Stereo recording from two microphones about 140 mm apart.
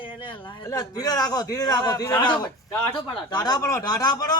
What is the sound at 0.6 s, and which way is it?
A man's voice, 25° left (ahead or behind).